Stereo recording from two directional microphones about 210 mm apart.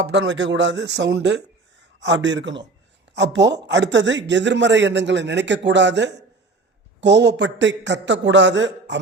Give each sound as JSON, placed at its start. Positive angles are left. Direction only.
{"t": 0.1, "sound": "speech", "side_deg": -55}